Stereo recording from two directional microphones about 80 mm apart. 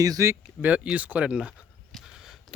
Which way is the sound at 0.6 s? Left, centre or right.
Centre.